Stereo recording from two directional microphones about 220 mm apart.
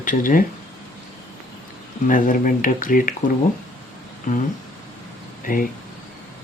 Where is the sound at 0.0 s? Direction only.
35° left (ahead or behind).